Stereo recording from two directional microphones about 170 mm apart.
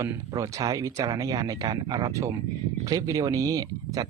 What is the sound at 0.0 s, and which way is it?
Speech, 20° right (ahead or behind).